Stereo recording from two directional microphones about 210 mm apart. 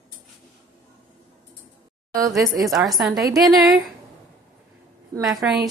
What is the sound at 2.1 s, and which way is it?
Speech, 15° right (ahead or behind).